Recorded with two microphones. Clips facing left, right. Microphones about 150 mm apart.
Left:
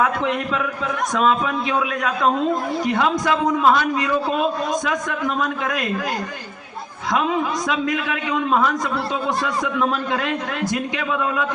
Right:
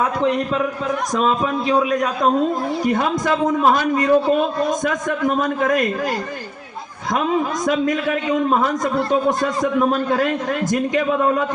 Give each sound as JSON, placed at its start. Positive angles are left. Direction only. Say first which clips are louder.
{"t": 0.0, "sound": "a man's voice", "louder": "right 2 dB", "side_deg": -35}
{"t": 7.7, "sound": "a man's voice", "louder": "right 4 dB", "side_deg": -45}